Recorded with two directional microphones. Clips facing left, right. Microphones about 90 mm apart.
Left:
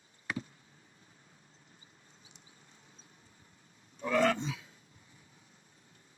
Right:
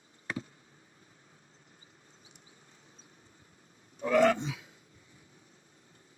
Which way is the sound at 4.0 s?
15° right (ahead or behind).